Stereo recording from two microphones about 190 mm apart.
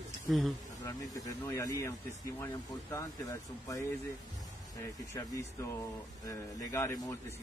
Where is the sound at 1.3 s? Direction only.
15° left (ahead or behind).